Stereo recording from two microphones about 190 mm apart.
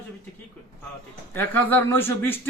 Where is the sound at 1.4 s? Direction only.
10° left (ahead or behind).